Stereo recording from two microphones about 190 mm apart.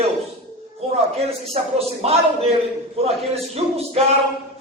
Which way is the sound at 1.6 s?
40° right (ahead or behind).